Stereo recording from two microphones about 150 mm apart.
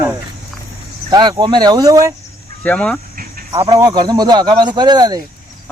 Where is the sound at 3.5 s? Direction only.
25° right (ahead or behind).